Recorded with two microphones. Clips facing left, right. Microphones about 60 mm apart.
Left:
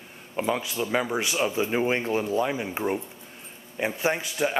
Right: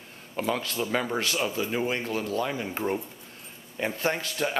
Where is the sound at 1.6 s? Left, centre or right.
Left.